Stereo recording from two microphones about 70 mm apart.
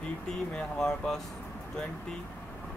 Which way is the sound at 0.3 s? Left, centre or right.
Centre.